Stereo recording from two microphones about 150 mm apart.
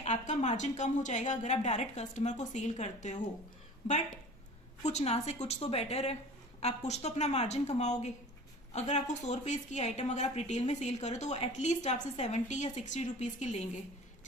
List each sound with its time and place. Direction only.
0.0 s a woman's voice: 50° left (ahead or behind)